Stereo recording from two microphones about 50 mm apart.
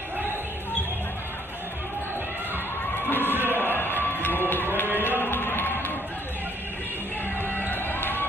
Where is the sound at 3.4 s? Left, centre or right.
Right.